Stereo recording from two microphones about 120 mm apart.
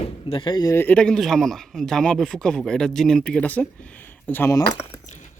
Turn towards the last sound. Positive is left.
turn(degrees=25)  # may be behind; listen again after turning